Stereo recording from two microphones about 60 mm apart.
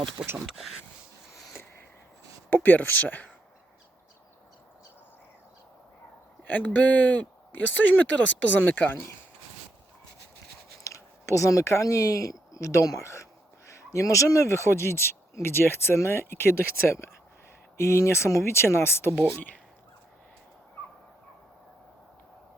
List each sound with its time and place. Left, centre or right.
0.4 s speech: centre
2.5 s speech: left
6.5 s speech: left
10.8 s speech: left